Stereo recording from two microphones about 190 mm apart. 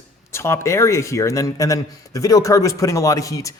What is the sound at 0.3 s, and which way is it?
A man's voice, 15° left (ahead or behind).